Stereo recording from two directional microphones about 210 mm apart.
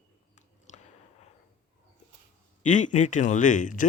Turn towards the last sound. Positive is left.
turn(degrees=35)  # may be behind; listen again after turning